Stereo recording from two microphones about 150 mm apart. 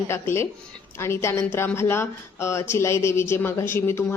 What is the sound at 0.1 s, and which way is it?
A woman's voice, 15° left (ahead or behind).